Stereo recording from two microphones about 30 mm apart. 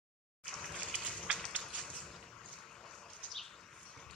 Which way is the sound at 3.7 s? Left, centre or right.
Left.